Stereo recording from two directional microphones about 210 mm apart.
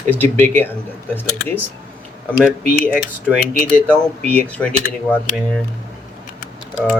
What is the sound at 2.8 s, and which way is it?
Speech, 5° left (ahead or behind).